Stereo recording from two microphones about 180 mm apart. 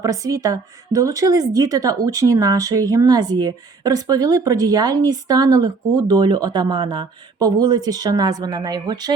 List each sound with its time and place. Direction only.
0.0 s a woman's voice: 20° right (ahead or behind)